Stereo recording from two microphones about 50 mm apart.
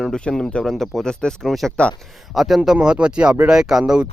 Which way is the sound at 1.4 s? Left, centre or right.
Centre.